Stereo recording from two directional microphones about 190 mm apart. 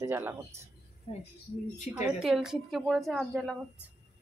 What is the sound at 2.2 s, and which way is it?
A woman's voice, 5° right (ahead or behind).